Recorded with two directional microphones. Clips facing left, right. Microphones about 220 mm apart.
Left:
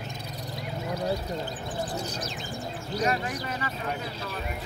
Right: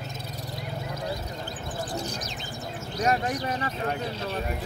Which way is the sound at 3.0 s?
40° right (ahead or behind).